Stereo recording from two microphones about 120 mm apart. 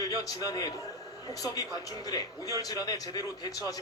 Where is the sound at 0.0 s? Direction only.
30° left (ahead or behind).